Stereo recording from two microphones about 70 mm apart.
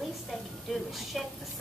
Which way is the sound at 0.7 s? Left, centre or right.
Centre.